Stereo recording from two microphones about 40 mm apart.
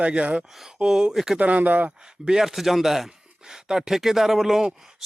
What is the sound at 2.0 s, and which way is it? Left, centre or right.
Speech, centre.